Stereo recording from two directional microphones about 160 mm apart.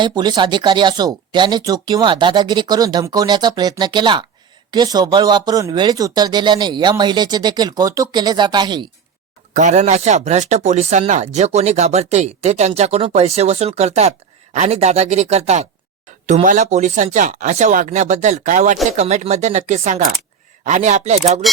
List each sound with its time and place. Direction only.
0.0 s speech: 25° right (ahead or behind)
9.6 s speech: 50° right (ahead or behind)